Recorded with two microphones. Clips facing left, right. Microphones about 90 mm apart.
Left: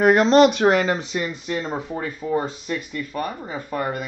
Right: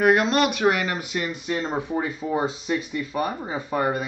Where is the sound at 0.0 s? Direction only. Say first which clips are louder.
Left 5 dB; 30° left (ahead or behind).